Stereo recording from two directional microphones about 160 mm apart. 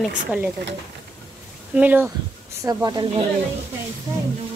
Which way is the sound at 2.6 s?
25° right (ahead or behind).